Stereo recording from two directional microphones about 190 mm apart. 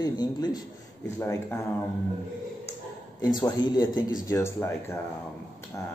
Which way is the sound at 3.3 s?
20° left (ahead or behind).